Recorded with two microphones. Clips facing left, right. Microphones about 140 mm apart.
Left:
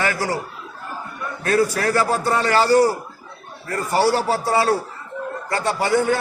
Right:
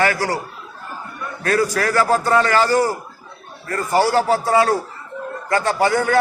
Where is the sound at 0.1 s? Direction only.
20° left (ahead or behind).